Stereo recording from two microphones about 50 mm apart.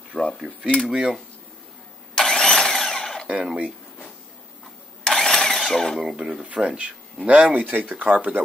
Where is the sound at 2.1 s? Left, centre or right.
Centre.